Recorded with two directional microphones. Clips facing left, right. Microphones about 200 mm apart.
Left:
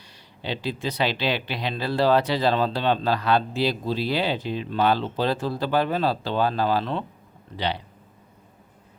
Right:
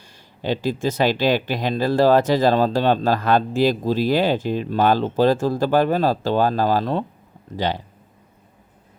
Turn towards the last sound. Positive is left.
turn(degrees=-45)  # may be behind; listen again after turning